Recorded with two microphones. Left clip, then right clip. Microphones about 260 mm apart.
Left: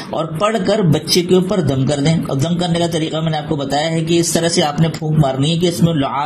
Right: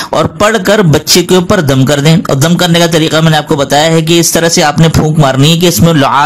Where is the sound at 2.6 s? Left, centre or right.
Right.